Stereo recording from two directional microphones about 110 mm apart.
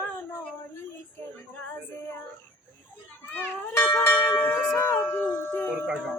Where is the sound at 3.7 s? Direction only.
20° left (ahead or behind).